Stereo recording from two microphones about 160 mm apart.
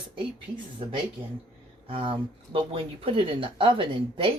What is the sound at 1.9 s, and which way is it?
Speech, 35° right (ahead or behind).